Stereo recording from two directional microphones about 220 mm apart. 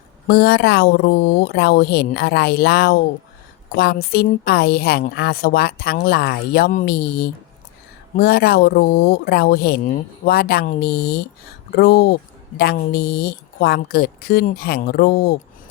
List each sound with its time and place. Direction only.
0.3 s a woman's voice: 50° left (ahead or behind)